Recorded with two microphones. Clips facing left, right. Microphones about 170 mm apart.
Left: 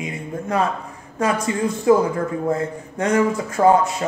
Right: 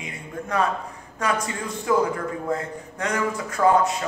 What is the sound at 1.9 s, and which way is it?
A man's voice, 30° left (ahead or behind).